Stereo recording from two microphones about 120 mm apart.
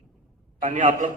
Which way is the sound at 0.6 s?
90° right.